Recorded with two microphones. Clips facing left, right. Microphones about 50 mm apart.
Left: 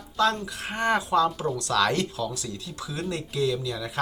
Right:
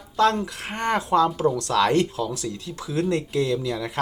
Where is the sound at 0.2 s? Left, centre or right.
Right.